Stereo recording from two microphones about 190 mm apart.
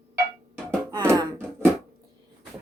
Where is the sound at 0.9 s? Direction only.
20° right (ahead or behind).